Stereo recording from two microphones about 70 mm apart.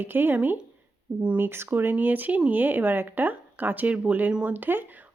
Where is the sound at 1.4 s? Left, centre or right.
Right; by 4.5 s centre.